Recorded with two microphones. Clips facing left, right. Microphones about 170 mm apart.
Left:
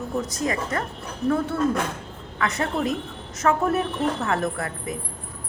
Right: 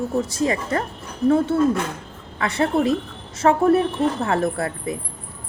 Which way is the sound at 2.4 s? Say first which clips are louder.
Right 5 dB; 30° right (ahead or behind).